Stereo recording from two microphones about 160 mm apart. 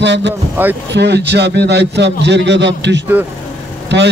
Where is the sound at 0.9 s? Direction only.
90° right.